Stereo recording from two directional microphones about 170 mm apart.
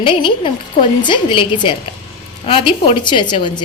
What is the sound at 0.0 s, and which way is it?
A woman's voice, 30° left (ahead or behind).